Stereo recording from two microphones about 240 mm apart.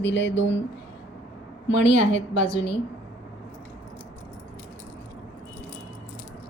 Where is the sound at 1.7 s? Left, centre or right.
Left.